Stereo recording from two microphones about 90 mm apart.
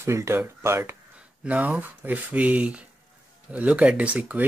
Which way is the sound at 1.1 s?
15° right (ahead or behind).